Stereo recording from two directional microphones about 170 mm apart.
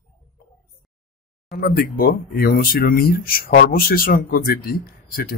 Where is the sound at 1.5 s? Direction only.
60° left (ahead or behind).